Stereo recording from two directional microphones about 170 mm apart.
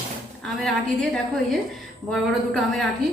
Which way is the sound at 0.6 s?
Centre (ahead or behind).